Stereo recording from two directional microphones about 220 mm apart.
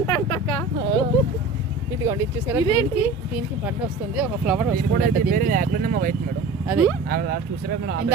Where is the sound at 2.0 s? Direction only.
10° right (ahead or behind).